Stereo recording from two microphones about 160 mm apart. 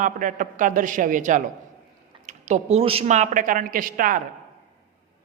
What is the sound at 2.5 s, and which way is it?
A man's voice, 45° right (ahead or behind).